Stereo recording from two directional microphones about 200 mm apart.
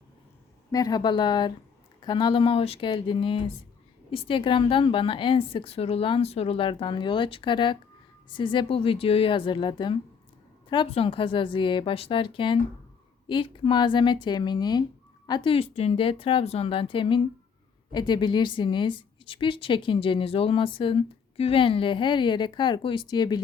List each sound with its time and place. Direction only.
0.7 s a woman's voice: 20° left (ahead or behind)